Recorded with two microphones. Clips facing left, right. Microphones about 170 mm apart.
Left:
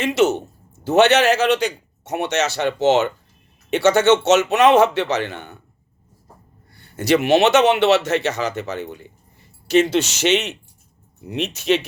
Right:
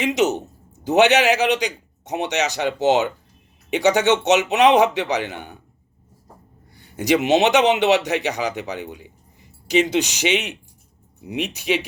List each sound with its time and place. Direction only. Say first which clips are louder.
0.0 s a man's voice: left 2 dB; 15° right (ahead or behind)
6.7 s a man's voice: left 1 dB; 15° right (ahead or behind)